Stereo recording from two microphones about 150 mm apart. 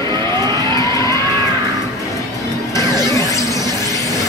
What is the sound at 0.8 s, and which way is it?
Vehicle, 20° left (ahead or behind).